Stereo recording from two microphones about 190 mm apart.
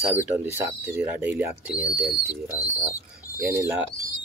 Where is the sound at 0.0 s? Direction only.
10° right (ahead or behind).